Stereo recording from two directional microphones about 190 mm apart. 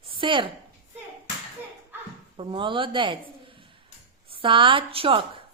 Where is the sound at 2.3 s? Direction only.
25° right (ahead or behind).